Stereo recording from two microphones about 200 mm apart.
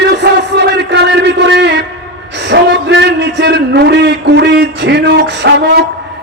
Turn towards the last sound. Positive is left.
turn(degrees=-60)  # may be behind; listen again after turning